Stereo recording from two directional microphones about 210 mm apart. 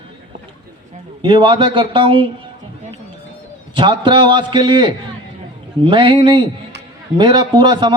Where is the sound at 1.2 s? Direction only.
25° right (ahead or behind).